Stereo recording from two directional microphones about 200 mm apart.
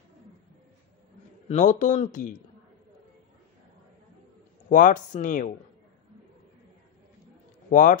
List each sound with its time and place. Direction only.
1.5 s speech: 40° left (ahead or behind)
4.6 s speech: 40° left (ahead or behind)
7.7 s speech: 40° left (ahead or behind)